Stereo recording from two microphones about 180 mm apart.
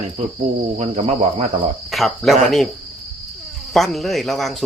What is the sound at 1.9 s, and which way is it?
Speech, centre (ahead or behind).